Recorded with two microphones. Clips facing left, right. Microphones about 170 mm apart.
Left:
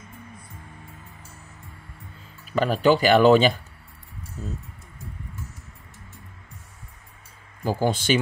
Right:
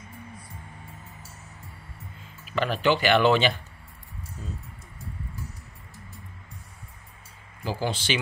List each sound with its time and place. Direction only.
2.4 s speech: 40° left (ahead or behind)
7.6 s speech: 50° left (ahead or behind)